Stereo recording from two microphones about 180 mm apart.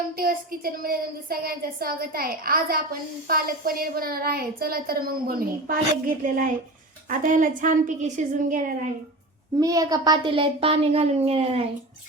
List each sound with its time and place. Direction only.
0.2 s a woman's voice: 55° right (ahead or behind)
9.6 s a child's voice: 20° right (ahead or behind)